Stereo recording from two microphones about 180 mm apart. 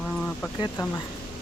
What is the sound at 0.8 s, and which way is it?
Speech, 20° left (ahead or behind).